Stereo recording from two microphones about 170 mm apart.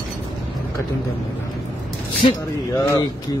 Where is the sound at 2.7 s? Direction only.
20° left (ahead or behind).